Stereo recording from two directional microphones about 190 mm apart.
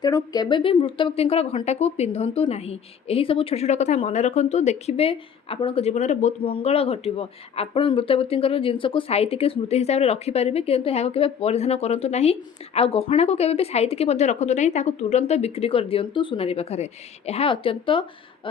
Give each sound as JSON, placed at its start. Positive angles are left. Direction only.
{"t": 0.0, "sound": "speech", "side_deg": 20}